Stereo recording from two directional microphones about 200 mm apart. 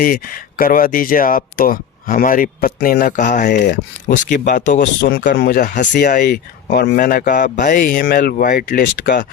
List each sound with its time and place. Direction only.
0.0 s speech: 45° left (ahead or behind)